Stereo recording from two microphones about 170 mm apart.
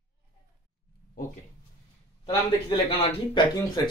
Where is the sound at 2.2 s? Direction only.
25° left (ahead or behind).